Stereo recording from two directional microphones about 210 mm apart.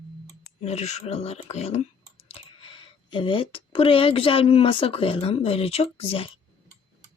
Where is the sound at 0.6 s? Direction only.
30° left (ahead or behind).